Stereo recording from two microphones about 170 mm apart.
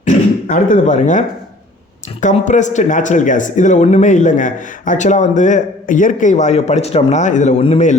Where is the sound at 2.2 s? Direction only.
45° left (ahead or behind).